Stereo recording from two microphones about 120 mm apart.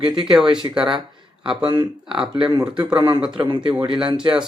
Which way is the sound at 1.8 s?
5° right (ahead or behind).